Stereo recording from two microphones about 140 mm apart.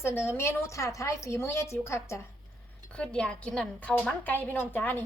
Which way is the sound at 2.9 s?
5° left (ahead or behind).